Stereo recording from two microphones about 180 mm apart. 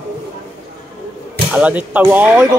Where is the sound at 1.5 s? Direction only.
10° right (ahead or behind).